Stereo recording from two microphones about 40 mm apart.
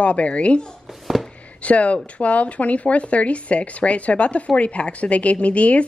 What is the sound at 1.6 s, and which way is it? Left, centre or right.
Speech, left.